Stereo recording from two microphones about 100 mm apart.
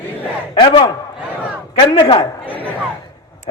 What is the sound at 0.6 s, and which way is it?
Speech, 60° left (ahead or behind).